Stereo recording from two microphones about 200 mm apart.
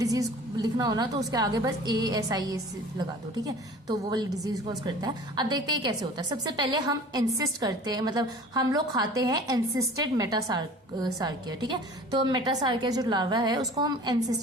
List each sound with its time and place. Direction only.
0.0 s a woman's voice: 15° right (ahead or behind)